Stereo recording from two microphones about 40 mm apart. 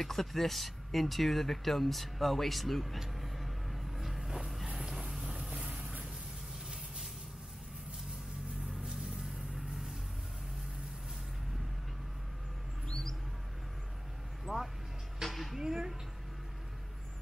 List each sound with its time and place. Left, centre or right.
0.0 s speech: centre
3.0 s vehicle: centre
4.7 s music: centre
5.1 s vehicle: centre
5.6 s vehicle: right
8.8 s music: right
14.4 s vehicle: centre
15.2 s a sound: centre
15.6 s a sound: centre